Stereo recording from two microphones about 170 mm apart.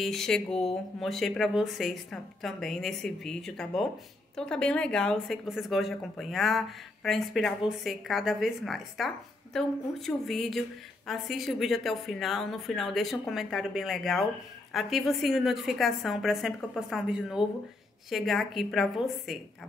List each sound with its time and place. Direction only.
0.0 s a woman's voice: centre (ahead or behind)